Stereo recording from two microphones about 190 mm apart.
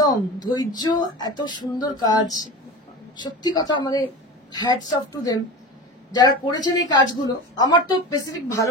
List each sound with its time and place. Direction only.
0.0 s a woman's voice: 20° left (ahead or behind)